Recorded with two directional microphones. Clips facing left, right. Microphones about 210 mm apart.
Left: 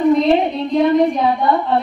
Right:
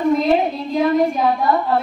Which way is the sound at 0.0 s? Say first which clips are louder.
Left 3 dB; centre (ahead or behind).